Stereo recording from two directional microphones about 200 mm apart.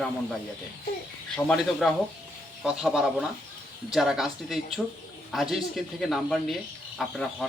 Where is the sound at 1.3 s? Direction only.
5° left (ahead or behind).